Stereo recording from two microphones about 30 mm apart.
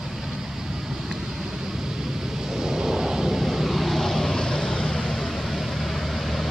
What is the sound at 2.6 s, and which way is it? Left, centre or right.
Thunder, right.